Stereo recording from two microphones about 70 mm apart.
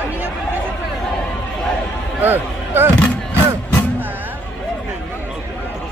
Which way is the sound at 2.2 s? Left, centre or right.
Right.